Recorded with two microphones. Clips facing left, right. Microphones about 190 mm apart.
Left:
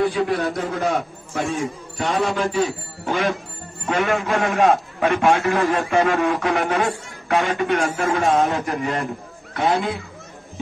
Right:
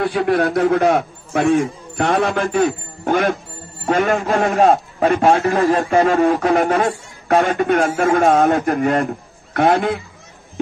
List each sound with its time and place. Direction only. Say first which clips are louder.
0.0 s a man's voice: right 3 dB; 60° right (ahead or behind)
3.8 s a man's voice: right 4 dB; 40° right (ahead or behind); by 9.9 s 55° right (ahead or behind)